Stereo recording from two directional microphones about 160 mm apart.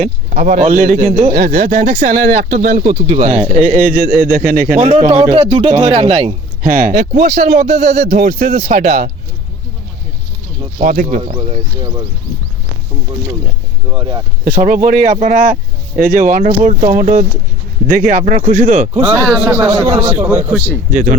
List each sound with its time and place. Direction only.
0.0 s speech: 55° right (ahead or behind)
1.4 s speech: 65° right (ahead or behind)
1.6 s speech: 45° right (ahead or behind)
4.9 s speech: 40° right (ahead or behind)
6.7 s speech: 55° right (ahead or behind)
10.8 s speech: 55° right (ahead or behind)
11.2 s speech: 40° right (ahead or behind)
14.0 s speech: 30° right (ahead or behind)
14.4 s speech: 60° right (ahead or behind)
19.2 s a man's voice: 5° left (ahead or behind)
19.9 s speech: 30° right (ahead or behind)
20.1 s a man's voice: 10° right (ahead or behind)
20.9 s speech: 55° right (ahead or behind)